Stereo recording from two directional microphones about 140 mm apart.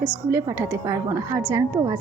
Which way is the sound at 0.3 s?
20° right (ahead or behind).